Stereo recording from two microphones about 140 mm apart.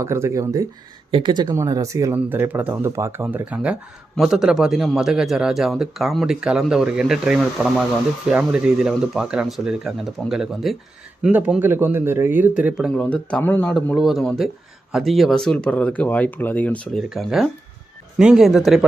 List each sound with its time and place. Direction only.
0.0 s speech: 20° right (ahead or behind)
1.1 s a man's voice: 35° right (ahead or behind); by 12.9 s 5° right (ahead or behind)
12.9 s speech: 10° left (ahead or behind)
17.1 s a man's voice: centre (ahead or behind)